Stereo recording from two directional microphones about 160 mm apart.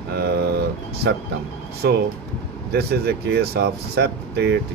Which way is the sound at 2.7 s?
90° right.